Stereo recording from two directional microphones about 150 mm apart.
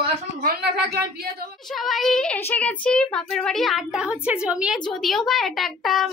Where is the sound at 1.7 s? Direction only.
Centre (ahead or behind).